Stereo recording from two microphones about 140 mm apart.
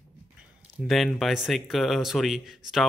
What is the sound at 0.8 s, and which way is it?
Speech, centre (ahead or behind).